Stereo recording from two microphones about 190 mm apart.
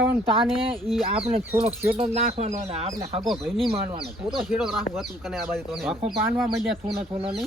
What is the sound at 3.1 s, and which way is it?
Speech, centre (ahead or behind).